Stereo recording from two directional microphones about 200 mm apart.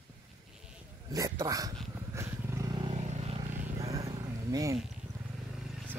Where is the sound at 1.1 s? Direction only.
15° right (ahead or behind).